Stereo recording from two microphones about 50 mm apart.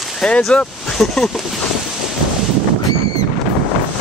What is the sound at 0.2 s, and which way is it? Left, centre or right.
Speech, centre.